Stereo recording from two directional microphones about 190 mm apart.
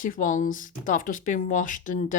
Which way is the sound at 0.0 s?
45° left (ahead or behind).